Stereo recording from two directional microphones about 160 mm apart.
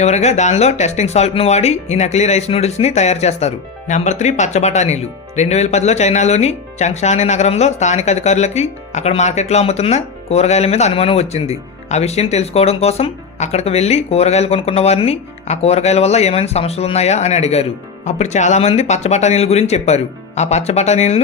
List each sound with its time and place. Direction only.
0.0 s speech: 45° left (ahead or behind)